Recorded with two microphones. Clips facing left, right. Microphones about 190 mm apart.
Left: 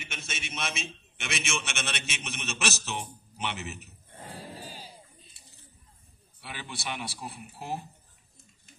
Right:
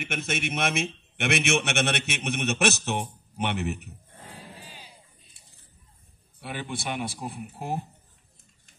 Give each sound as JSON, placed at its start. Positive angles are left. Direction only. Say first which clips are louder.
{"t": 0.0, "sound": "a man's voice", "louder": "right 11 dB", "side_deg": -55}
{"t": 4.6, "sound": "a sound", "louder": "left 4 dB", "side_deg": 40}
{"t": 6.4, "sound": "a man's voice", "louder": "right 6 dB", "side_deg": -50}